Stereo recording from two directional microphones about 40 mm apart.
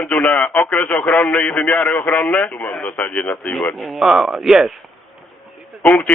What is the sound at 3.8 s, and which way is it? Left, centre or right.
Speech, centre.